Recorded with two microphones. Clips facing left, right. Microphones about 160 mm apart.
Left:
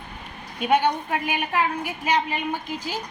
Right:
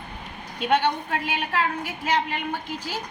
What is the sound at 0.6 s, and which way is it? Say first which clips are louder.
A woman's voice: left 1 dB; 10° left (ahead or behind).